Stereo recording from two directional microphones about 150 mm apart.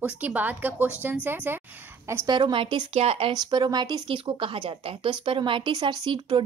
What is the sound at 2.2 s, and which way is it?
Speech, 30° right (ahead or behind).